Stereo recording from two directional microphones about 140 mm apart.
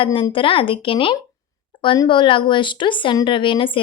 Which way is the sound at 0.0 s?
40° left (ahead or behind).